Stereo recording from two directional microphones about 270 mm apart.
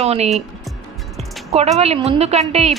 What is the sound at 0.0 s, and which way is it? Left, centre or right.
Music, right.